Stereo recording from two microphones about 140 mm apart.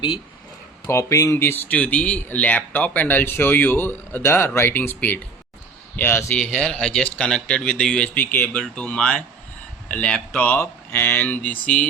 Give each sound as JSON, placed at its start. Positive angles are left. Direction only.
{"t": 0.9, "sound": "speech", "side_deg": 20}
{"t": 6.3, "sound": "speech", "side_deg": 5}